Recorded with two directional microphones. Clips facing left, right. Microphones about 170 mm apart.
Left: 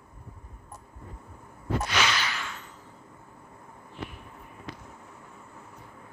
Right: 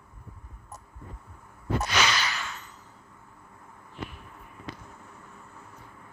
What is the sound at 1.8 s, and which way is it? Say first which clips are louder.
Whip: right 1 dB; 40° right (ahead or behind).